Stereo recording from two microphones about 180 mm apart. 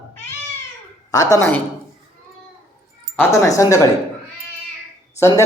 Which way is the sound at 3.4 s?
20° left (ahead or behind).